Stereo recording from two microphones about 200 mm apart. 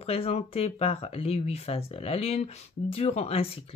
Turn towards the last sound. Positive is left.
turn(degrees=30)  # may be behind; listen again after turning